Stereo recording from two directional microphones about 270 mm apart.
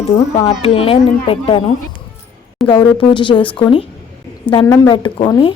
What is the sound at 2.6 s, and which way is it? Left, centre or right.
A woman's voice, centre.